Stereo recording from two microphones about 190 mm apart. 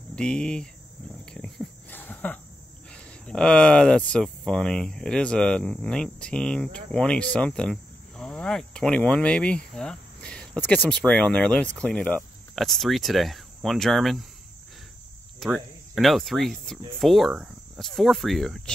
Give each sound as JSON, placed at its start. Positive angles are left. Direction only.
{"t": 0.1, "sound": "speech", "side_deg": 5}
{"t": 1.3, "sound": "a sound", "side_deg": 5}
{"t": 2.9, "sound": "speech", "side_deg": 5}
{"t": 15.4, "sound": "speech", "side_deg": 0}